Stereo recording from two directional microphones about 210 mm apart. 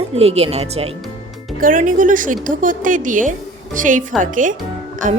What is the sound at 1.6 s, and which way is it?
Speech, 40° right (ahead or behind).